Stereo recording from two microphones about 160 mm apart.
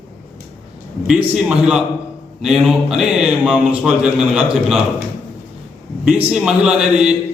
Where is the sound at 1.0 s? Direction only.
5° right (ahead or behind).